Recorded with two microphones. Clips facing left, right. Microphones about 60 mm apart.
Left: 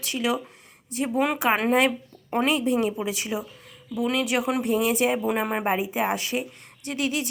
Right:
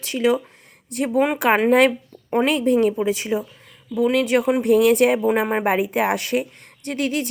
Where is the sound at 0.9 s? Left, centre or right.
Right.